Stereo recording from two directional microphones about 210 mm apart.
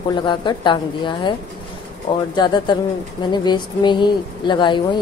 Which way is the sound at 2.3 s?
20° left (ahead or behind).